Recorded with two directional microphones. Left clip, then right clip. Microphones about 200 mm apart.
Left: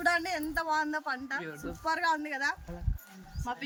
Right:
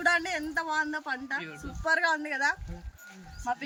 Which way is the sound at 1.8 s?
10° right (ahead or behind).